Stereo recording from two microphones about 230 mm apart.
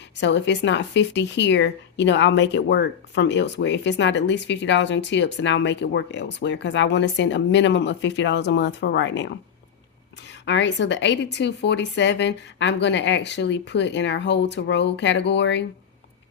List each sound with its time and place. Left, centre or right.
0.2 s speech: left
10.4 s speech: left